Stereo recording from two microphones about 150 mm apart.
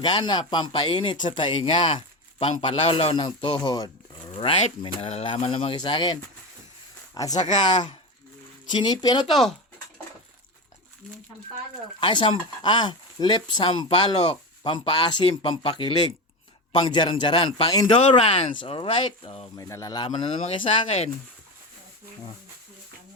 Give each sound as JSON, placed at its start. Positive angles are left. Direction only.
{"t": 0.0, "sound": "speech", "side_deg": 30}
{"t": 4.3, "sound": "speech", "side_deg": 40}
{"t": 11.9, "sound": "speech", "side_deg": 30}
{"t": 19.5, "sound": "speech", "side_deg": 20}